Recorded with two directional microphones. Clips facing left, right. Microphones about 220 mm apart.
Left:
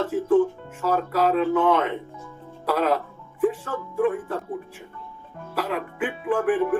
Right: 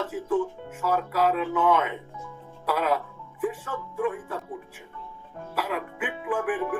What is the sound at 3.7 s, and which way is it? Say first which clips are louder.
Speech: left 5 dB; 45° left (ahead or behind).